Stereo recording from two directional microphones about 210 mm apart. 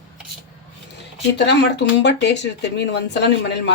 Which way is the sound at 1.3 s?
55° left (ahead or behind).